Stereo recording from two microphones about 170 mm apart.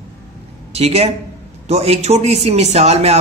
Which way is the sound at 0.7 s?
35° right (ahead or behind).